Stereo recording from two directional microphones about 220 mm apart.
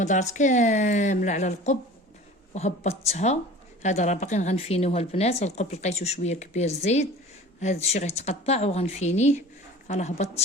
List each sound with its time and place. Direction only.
0.0 s a woman's voice: 30° left (ahead or behind)